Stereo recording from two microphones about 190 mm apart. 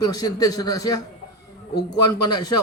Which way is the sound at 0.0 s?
20° left (ahead or behind).